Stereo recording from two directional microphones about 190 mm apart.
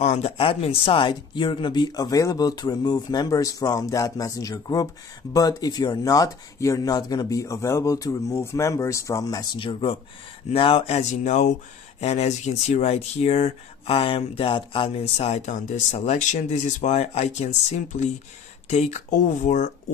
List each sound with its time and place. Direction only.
0.0 s speech: 35° left (ahead or behind)